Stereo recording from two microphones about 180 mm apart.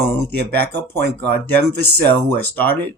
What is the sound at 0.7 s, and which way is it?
Speech, 70° right (ahead or behind).